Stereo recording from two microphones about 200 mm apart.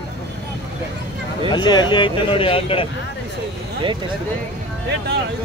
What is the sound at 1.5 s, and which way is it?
Speech, 20° left (ahead or behind).